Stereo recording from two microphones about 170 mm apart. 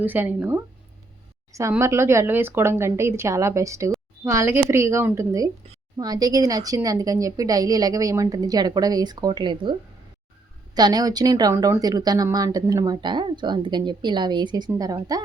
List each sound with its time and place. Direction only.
0.0 s speech: 10° right (ahead or behind)
1.7 s speech: 15° right (ahead or behind)
10.8 s speech: 25° right (ahead or behind)